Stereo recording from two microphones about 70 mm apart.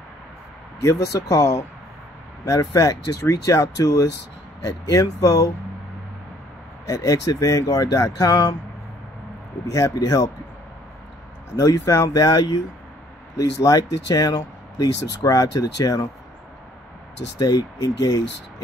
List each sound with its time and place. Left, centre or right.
0.8 s speech: left
2.7 s speech: left
6.9 s speech: left
9.7 s speech: left
11.5 s speech: left
17.4 s speech: left